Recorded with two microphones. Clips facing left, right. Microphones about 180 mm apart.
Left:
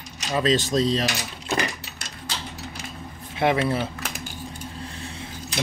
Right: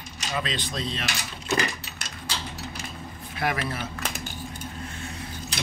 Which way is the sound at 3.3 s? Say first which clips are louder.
Left 7 dB; 25° left (ahead or behind).